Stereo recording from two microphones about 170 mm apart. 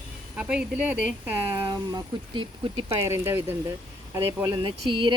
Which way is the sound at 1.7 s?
20° right (ahead or behind).